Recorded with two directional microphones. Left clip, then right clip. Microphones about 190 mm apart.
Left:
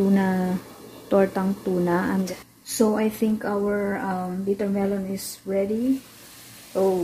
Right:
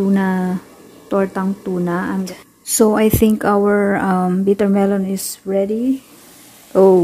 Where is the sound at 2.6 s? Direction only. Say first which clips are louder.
Right 9 dB; 45° right (ahead or behind).